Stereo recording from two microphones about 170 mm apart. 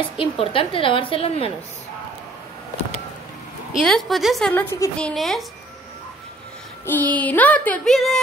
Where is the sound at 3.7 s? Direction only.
Centre (ahead or behind).